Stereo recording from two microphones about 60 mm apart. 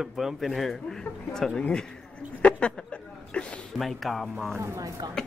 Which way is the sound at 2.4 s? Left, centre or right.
Centre.